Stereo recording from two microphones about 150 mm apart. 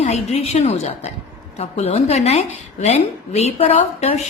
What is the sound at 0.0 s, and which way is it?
A woman's voice, 45° left (ahead or behind).